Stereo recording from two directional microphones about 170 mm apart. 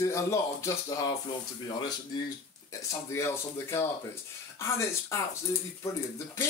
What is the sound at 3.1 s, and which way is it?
Speech, 15° left (ahead or behind).